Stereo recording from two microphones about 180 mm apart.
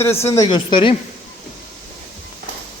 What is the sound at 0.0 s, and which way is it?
Speech, 15° left (ahead or behind).